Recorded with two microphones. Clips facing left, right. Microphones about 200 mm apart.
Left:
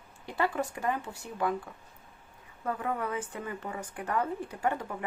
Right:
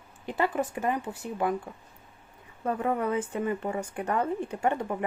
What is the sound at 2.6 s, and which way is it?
Speech, 30° right (ahead or behind).